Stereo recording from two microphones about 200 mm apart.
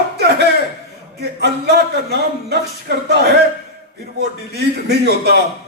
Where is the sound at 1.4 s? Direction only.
55° right (ahead or behind).